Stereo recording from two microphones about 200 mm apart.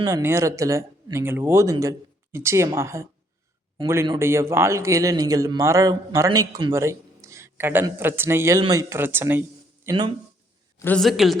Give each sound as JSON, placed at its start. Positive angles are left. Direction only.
{"t": 0.0, "sound": "a man's voice", "side_deg": -15}
{"t": 9.8, "sound": "speech", "side_deg": -20}
{"t": 10.8, "sound": "a woman's voice", "side_deg": 5}